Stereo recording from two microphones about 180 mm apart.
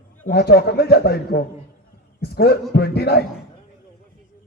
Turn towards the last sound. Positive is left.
turn(degrees=60)  # may be behind; listen again after turning